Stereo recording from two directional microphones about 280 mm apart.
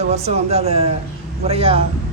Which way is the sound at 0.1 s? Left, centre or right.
Right.